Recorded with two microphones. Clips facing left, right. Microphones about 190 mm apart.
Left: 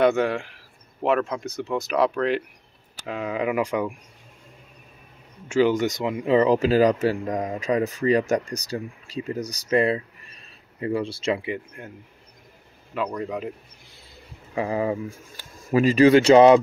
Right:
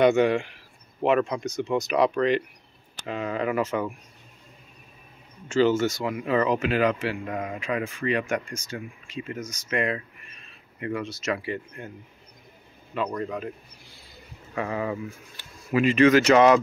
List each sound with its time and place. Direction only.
0.0 s speech: centre (ahead or behind)
5.5 s speech: 15° left (ahead or behind)
11.5 s speech: 5° left (ahead or behind)
12.9 s speech: 5° left (ahead or behind)
14.5 s speech: 30° left (ahead or behind)